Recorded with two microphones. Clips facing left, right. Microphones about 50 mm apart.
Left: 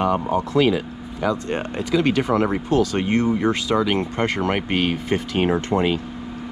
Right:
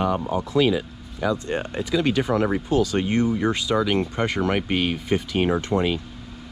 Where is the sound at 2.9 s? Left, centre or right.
Left.